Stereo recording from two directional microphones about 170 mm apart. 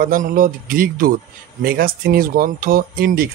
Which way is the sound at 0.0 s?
55° right (ahead or behind).